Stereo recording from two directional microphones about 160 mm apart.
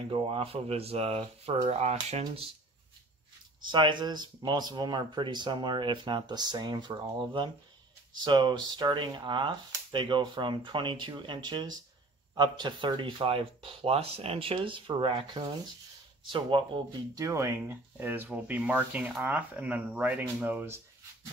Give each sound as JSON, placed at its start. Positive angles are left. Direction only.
{"t": 0.1, "sound": "speech", "side_deg": -35}
{"t": 3.6, "sound": "speech", "side_deg": -30}